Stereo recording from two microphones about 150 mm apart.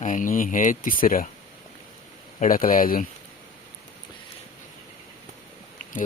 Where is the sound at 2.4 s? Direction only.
65° left (ahead or behind).